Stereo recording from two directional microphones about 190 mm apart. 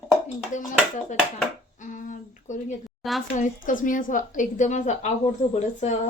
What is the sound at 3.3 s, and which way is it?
A woman's voice, 40° left (ahead or behind).